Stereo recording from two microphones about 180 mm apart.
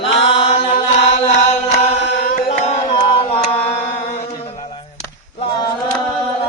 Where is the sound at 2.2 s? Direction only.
40° left (ahead or behind).